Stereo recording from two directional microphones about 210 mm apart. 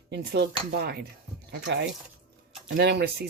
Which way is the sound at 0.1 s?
55° right (ahead or behind).